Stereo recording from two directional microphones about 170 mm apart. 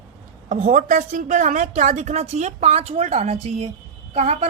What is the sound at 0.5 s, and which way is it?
A woman's voice, 50° right (ahead or behind).